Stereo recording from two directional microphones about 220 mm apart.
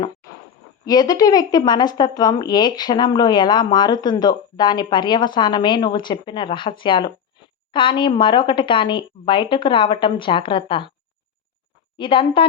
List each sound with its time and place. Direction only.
0.9 s speech: 15° left (ahead or behind)
11.9 s speech: 25° left (ahead or behind)